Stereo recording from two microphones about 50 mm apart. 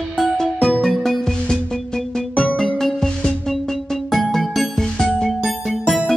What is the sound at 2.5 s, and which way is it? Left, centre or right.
Music, centre.